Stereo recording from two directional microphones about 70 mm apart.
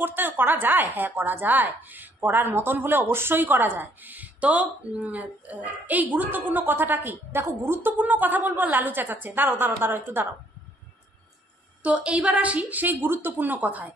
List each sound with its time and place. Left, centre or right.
0.0 s a woman's voice: right
11.8 s a woman's voice: centre